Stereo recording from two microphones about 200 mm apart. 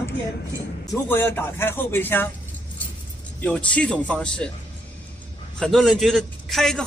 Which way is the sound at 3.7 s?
5° left (ahead or behind).